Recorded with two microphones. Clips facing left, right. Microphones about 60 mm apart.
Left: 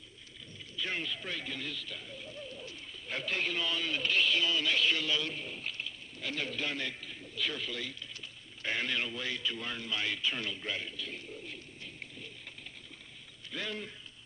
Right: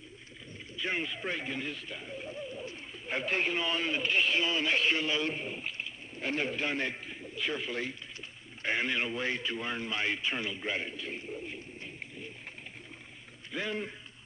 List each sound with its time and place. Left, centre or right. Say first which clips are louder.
0.7 s speech: right 3 dB; right
13.5 s a man's voice: right 4 dB; right